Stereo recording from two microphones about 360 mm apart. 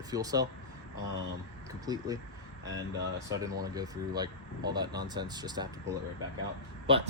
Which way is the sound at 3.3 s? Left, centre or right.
Centre.